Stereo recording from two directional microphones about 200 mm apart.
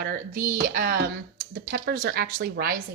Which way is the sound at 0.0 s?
45° right (ahead or behind).